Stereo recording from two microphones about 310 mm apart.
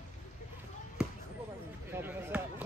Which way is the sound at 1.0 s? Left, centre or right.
Centre.